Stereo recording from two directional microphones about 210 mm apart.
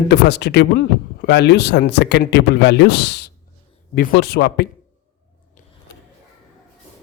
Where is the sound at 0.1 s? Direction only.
55° left (ahead or behind).